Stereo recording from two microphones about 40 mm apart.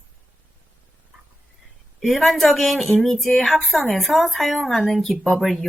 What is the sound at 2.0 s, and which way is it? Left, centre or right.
A woman's voice, centre.